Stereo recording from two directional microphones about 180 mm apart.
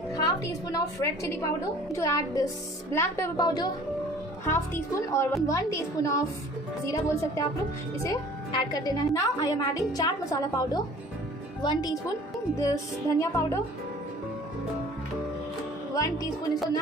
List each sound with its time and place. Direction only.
0.1 s a woman's voice: 20° left (ahead or behind)
15.9 s speech: 20° left (ahead or behind)